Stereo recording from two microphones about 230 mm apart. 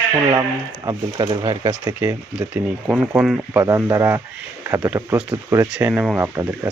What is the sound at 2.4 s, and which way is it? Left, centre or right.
Speech, centre.